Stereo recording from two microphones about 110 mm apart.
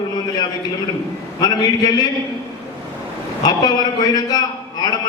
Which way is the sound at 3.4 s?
40° left (ahead or behind).